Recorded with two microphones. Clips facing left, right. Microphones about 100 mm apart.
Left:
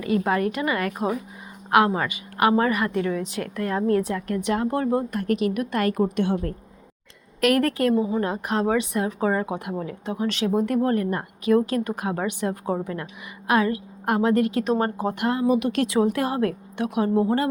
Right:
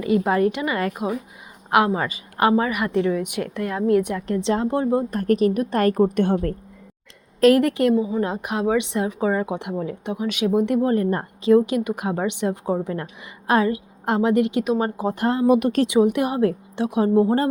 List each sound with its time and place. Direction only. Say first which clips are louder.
0.0 s a woman's voice: right 3 dB; 20° right (ahead or behind)
2.6 s speech: right 1 dB; 15° right (ahead or behind)
3.7 s speech: right 2 dB; 10° right (ahead or behind)
4.4 s speech: right 3 dB; 30° right (ahead or behind)
5.1 s a woman's voice: right 4 dB; 40° right (ahead or behind)
7.4 s speech: right 5 dB; 25° right (ahead or behind)
7.9 s a woman's voice: right 1 dB; centre (ahead or behind)
8.2 s speech: right 1 dB; 20° right (ahead or behind)
8.8 s speech: right 1 dB; 20° right (ahead or behind)
9.5 s speech: right 3 dB; 20° right (ahead or behind)
15.1 s a woman's voice: right 3 dB; 35° right (ahead or behind)
15.5 s speech: right 3 dB; 50° right (ahead or behind)
15.9 s speech: right 3 dB; 20° right (ahead or behind)